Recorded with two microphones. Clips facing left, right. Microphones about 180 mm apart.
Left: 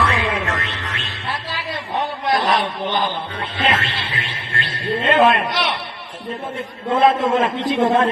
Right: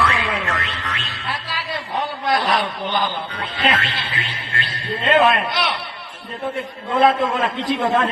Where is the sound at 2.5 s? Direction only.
25° left (ahead or behind).